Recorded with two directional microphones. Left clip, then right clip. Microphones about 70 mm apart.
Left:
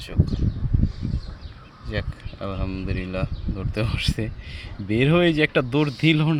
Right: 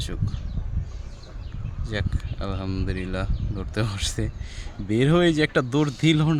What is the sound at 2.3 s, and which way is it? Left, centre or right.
Speech, right.